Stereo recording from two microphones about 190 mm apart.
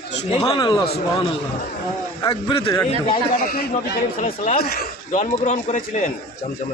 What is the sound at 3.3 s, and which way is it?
A man's voice, 50° left (ahead or behind).